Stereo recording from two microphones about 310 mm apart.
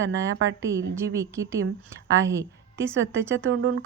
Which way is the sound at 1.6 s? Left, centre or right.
Right.